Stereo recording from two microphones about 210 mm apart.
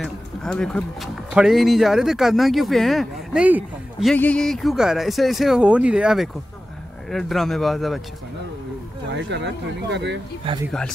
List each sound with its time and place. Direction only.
0.0 s speech: 5° left (ahead or behind)
4.1 s speech: 5° left (ahead or behind)
9.1 s speech: 55° right (ahead or behind)